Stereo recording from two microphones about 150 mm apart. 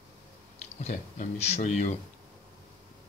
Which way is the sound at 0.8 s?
50° left (ahead or behind).